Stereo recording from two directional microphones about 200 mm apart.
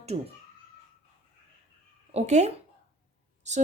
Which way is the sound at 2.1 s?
35° right (ahead or behind).